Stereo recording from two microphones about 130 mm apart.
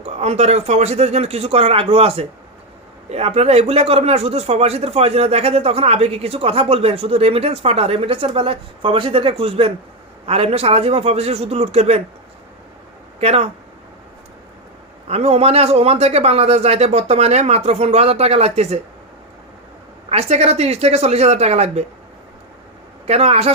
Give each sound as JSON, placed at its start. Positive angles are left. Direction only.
{"t": 0.0, "sound": "speech", "side_deg": -55}
{"t": 13.1, "sound": "speech", "side_deg": -50}
{"t": 15.1, "sound": "speech", "side_deg": -50}
{"t": 20.1, "sound": "speech", "side_deg": -55}
{"t": 23.0, "sound": "speech", "side_deg": -50}